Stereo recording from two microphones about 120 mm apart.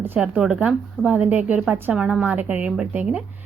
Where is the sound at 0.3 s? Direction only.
10° right (ahead or behind).